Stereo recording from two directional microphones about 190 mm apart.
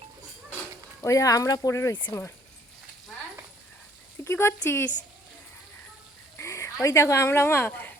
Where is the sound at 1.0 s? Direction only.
15° left (ahead or behind).